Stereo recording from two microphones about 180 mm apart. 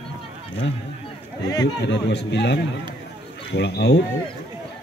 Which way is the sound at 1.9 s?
70° left (ahead or behind).